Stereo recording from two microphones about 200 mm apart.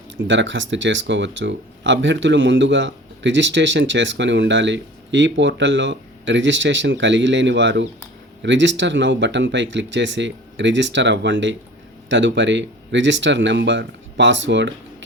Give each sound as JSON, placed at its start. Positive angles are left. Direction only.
{"t": 0.3, "sound": "speech", "side_deg": -65}